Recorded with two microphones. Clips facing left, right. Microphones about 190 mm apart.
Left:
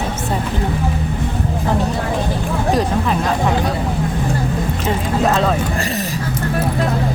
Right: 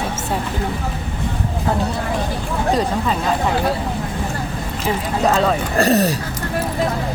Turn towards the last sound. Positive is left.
turn(degrees=-40)  # may be behind; listen again after turning